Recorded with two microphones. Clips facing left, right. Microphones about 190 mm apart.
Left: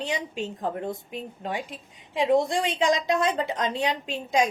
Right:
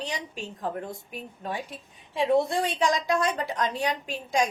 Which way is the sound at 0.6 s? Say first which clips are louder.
Even; 25° left (ahead or behind).